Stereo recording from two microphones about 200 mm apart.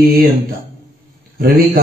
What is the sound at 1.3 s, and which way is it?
Speech, 50° right (ahead or behind).